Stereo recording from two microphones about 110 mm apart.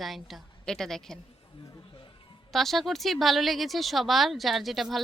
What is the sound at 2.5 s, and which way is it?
Speech, centre (ahead or behind).